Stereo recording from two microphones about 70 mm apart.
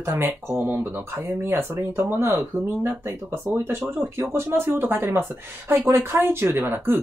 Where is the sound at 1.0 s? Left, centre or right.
Right.